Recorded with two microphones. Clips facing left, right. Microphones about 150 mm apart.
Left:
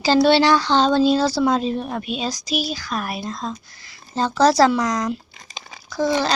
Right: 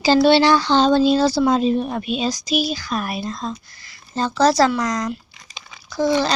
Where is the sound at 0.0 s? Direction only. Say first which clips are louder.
Right 1 dB; 5° right (ahead or behind).